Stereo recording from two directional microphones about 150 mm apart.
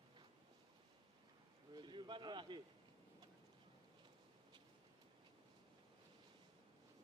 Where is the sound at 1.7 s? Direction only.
30° right (ahead or behind).